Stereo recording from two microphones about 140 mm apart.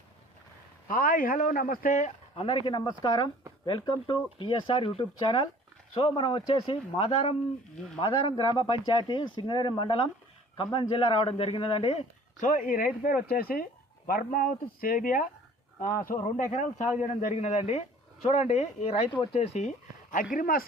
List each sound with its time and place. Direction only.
0.9 s a man's voice: 80° left; by 12.0 s 40° left (ahead or behind)
12.4 s speech: 65° left (ahead or behind); by 15.3 s 85° left
15.8 s a man's voice: 70° left (ahead or behind)
20.3 s speech: 90° left